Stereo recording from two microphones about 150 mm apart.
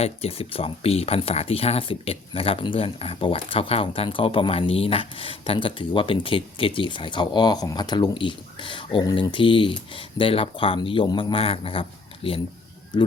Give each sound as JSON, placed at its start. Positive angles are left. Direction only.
{"t": 0.0, "sound": "speech", "side_deg": 40}